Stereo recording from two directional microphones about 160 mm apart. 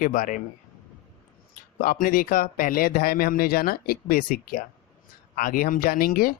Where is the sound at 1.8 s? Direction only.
60° left (ahead or behind).